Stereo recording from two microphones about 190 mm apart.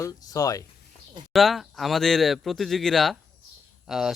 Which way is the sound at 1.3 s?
Centre (ahead or behind).